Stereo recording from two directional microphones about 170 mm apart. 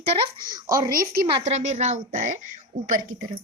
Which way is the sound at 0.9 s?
60° right (ahead or behind).